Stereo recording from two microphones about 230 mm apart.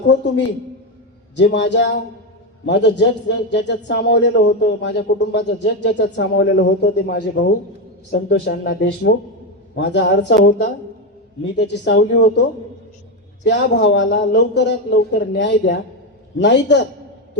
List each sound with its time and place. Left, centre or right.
1.4 s a man's voice: left
13.4 s a man's voice: left